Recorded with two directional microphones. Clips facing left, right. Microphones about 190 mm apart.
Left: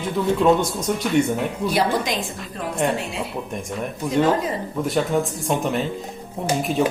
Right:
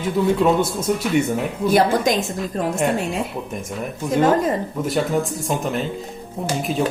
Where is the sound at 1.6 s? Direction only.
45° right (ahead or behind).